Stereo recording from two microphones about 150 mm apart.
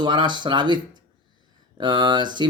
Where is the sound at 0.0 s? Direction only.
30° right (ahead or behind).